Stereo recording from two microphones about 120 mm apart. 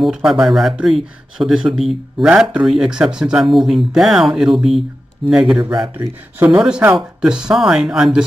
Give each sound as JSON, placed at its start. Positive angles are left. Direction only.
{"t": 0.0, "sound": "speech", "side_deg": -5}
{"t": 5.9, "sound": "speech", "side_deg": -20}
{"t": 6.6, "sound": "speech", "side_deg": -5}